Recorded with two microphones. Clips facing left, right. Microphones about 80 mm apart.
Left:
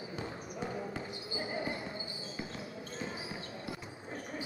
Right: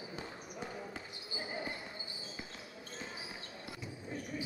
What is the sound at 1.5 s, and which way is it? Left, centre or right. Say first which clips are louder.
Basketball bounce: left 4 dB; left.